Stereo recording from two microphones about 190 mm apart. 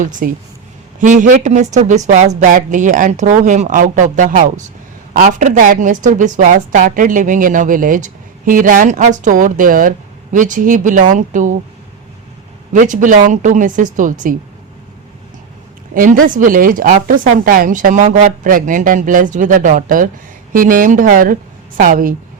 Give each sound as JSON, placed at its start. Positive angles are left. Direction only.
{"t": 0.0, "sound": "a woman's voice", "side_deg": -45}
{"t": 12.7, "sound": "a woman's voice", "side_deg": -40}
{"t": 16.0, "sound": "a woman's voice", "side_deg": -45}